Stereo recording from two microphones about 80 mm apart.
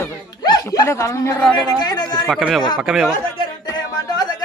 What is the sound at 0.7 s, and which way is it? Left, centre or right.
Speech, left.